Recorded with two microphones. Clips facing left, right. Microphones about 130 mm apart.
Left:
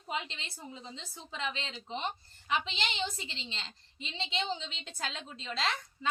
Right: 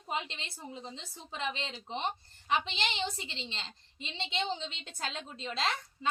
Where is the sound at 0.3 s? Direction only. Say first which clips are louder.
Right 2 dB; 55° right (ahead or behind).